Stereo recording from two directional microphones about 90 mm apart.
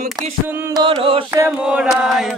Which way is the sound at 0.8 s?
85° right.